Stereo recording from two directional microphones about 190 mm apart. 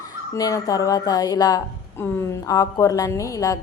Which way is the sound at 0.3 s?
20° left (ahead or behind).